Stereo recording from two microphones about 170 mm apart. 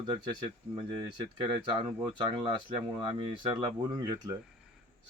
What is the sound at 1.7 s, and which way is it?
Speech, 30° right (ahead or behind).